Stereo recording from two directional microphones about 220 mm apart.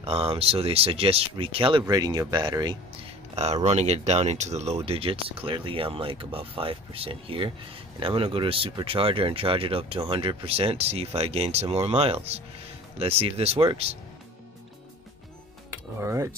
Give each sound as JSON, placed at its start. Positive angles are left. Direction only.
{"t": 0.0, "sound": "speech", "side_deg": -25}
{"t": 15.7, "sound": "speech", "side_deg": -10}